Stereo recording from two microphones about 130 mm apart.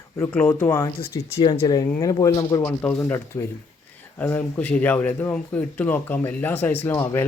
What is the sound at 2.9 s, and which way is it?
Speech, 25° left (ahead or behind).